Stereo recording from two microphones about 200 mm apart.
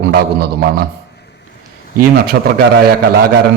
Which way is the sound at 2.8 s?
50° right (ahead or behind).